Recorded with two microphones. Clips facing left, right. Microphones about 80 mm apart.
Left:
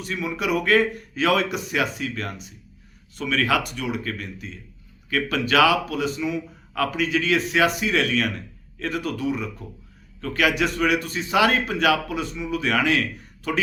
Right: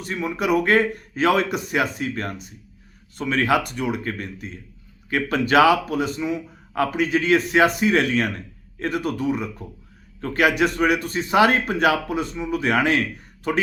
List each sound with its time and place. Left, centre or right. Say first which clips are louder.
0.0 s a man's voice: right 2 dB; right